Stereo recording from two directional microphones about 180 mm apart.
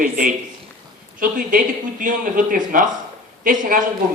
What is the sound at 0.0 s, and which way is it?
A man's voice, 50° right (ahead or behind).